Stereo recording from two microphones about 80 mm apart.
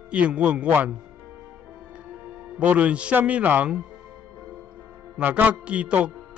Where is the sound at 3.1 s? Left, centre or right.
Centre.